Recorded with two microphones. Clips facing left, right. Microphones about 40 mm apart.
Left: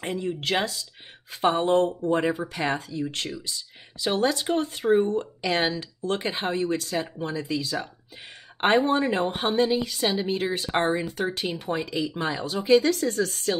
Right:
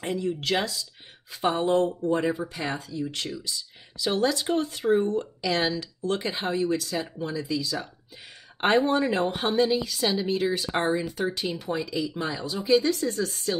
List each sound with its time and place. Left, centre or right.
0.0 s a woman's voice: left